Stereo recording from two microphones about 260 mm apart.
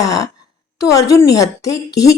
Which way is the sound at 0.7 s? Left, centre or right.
Centre.